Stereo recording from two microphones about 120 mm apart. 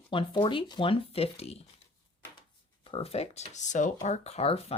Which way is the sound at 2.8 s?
50° left (ahead or behind).